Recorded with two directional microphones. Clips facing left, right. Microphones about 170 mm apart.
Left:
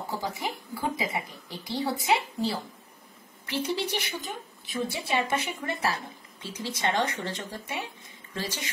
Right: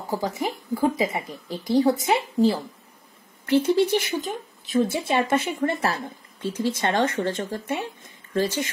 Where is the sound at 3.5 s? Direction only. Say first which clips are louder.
Right 11 dB; 50° right (ahead or behind).